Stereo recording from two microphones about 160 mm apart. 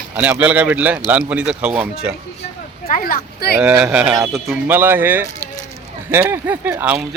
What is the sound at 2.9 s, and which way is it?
Speech, 65° left (ahead or behind).